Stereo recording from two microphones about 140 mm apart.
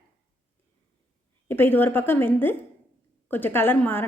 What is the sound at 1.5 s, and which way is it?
A woman's voice, 15° left (ahead or behind).